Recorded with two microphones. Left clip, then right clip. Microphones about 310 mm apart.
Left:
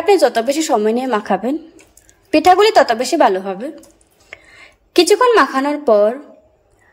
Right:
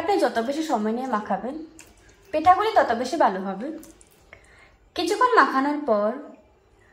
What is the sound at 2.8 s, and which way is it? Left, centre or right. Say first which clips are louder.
Speech: left 8 dB; left.